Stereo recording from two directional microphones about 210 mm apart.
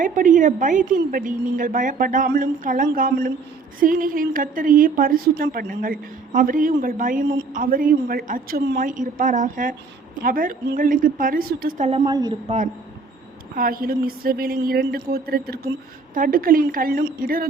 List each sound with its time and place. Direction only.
0.0 s a woman's voice: 40° right (ahead or behind)
11.9 s a woman's voice: 25° right (ahead or behind)
13.6 s a woman's voice: 45° right (ahead or behind)